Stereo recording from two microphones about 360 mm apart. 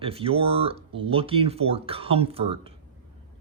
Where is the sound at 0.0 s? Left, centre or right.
Centre.